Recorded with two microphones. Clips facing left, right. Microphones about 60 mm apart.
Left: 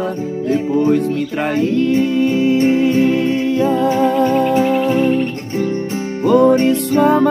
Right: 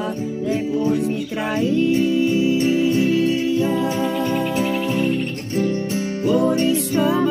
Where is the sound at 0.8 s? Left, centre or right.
Left.